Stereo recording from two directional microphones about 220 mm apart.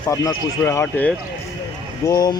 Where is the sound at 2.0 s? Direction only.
15° left (ahead or behind).